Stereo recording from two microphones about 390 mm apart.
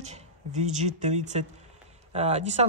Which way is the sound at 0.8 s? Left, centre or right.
Centre.